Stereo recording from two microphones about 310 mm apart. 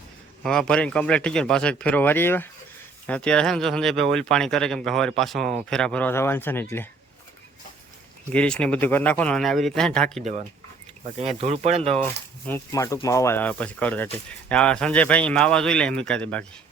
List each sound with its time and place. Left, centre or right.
0.4 s speech: centre
8.3 s speech: centre
11.3 s speech: right
12.5 s speech: centre